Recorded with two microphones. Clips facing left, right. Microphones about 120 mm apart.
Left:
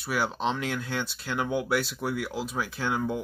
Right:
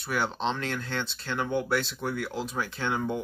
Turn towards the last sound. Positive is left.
turn(degrees=0)  # may be behind; listen again after turning